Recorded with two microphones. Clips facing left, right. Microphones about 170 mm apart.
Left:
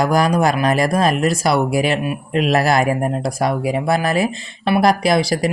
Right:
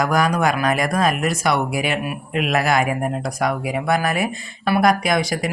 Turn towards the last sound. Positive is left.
turn(degrees=35)  # may be behind; listen again after turning